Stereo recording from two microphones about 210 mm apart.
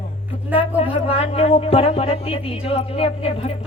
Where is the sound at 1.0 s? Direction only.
30° left (ahead or behind).